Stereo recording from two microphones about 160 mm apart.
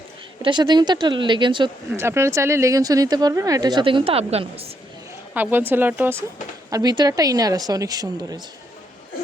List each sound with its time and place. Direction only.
0.4 s speech: 30° right (ahead or behind)
2.0 s speech: 15° right (ahead or behind); by 4.6 s 40° right (ahead or behind)
5.3 s speech: 10° right (ahead or behind)
6.7 s speech: 25° right (ahead or behind)